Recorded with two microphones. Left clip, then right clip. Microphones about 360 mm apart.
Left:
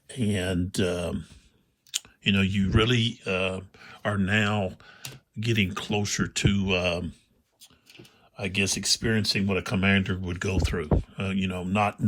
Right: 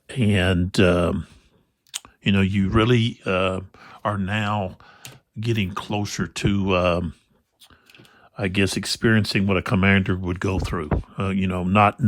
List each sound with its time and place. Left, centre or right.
0.1 s speech: centre
8.5 s speech: right